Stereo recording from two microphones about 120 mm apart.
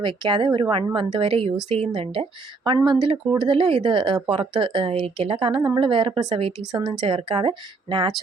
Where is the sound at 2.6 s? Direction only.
40° right (ahead or behind).